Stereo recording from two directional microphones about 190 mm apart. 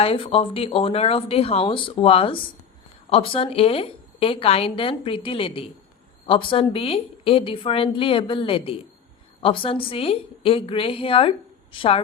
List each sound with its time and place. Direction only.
0.0 s a woman's voice: 30° left (ahead or behind)